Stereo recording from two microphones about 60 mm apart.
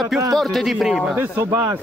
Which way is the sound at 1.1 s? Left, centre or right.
Right.